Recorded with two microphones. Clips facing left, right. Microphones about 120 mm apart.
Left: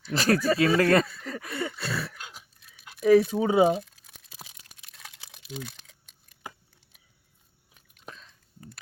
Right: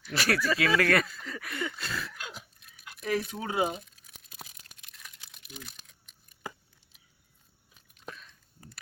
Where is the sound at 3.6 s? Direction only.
90° left.